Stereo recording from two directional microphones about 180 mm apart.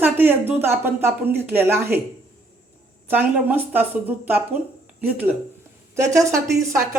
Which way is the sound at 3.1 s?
10° right (ahead or behind).